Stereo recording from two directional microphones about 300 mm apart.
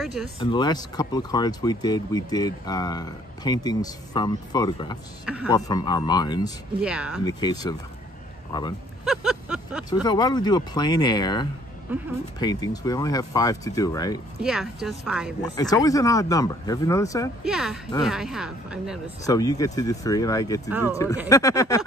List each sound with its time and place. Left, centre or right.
0.0 s speech: centre
0.4 s speech: centre
5.2 s speech: centre
5.5 s speech: centre
6.8 s speech: centre
7.2 s speech: centre
9.0 s a sound: centre
10.0 s speech: centre
11.9 s speech: centre
12.4 s speech: centre
14.4 s speech: centre
15.4 s speech: centre
17.5 s speech: centre
19.2 s speech: centre